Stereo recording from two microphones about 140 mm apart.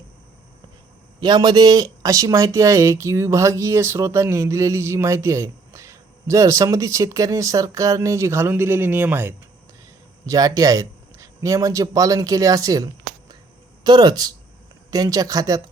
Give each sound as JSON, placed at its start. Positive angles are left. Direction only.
{"t": 1.2, "sound": "speech", "side_deg": -30}
{"t": 10.2, "sound": "speech", "side_deg": -25}